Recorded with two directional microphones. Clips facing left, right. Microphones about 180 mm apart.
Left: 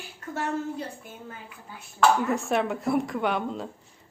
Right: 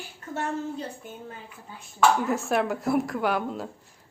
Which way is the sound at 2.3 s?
Centre (ahead or behind).